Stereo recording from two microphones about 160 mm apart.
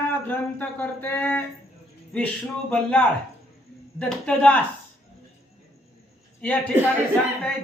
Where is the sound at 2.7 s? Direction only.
5° left (ahead or behind).